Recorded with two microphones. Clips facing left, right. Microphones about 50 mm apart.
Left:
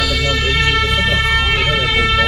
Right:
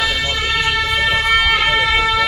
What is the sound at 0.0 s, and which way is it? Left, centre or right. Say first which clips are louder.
Music: left 1 dB; right.